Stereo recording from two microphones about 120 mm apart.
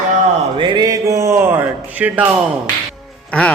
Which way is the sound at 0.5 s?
40° right (ahead or behind).